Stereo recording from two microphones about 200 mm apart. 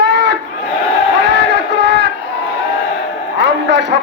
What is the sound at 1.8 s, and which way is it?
Crowd, 60° right (ahead or behind).